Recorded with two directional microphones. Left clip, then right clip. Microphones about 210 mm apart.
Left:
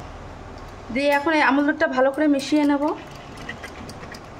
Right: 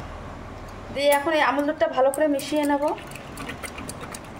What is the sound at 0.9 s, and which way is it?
A woman's voice, 30° left (ahead or behind).